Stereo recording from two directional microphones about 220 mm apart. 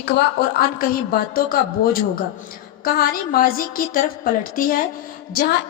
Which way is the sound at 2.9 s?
40° left (ahead or behind).